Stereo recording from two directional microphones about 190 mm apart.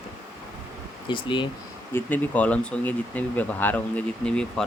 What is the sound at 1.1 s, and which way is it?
Speech, 25° left (ahead or behind).